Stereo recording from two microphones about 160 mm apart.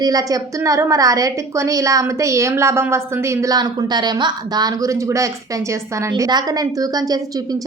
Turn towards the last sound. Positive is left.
turn(degrees=-25)  # may be behind; listen again after turning